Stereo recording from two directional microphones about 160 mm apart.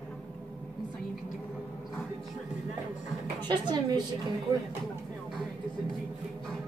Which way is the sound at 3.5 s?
25° right (ahead or behind).